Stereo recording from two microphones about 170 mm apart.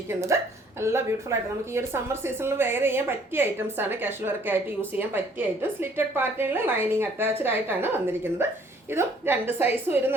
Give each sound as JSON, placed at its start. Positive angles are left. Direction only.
{"t": 0.1, "sound": "a woman's voice", "side_deg": -15}